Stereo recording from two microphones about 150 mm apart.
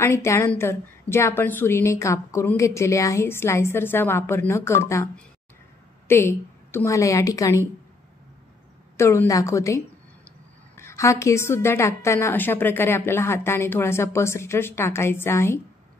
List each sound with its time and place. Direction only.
0.0 s a woman's voice: 15° left (ahead or behind)
8.9 s a woman's voice: 15° left (ahead or behind)
10.8 s a woman's voice: 20° left (ahead or behind)